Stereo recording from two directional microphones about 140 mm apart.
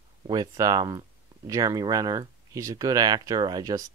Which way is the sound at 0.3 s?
25° right (ahead or behind).